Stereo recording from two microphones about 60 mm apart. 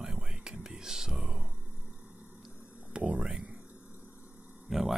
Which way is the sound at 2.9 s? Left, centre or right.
Centre.